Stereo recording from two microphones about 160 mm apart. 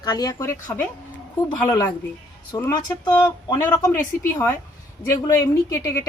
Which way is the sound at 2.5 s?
25° left (ahead or behind).